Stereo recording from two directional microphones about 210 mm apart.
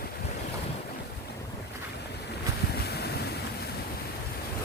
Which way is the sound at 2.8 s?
50° left (ahead or behind).